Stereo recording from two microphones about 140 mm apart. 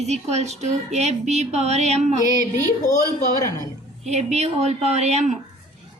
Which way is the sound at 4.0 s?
50° right (ahead or behind).